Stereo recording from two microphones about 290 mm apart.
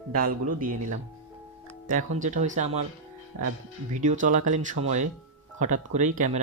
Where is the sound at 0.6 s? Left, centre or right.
Right.